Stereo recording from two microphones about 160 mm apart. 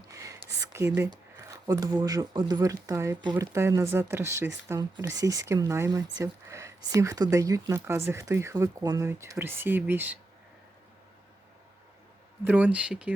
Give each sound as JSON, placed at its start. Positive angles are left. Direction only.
{"t": 0.1, "sound": "speech", "side_deg": -20}
{"t": 12.5, "sound": "speech", "side_deg": -10}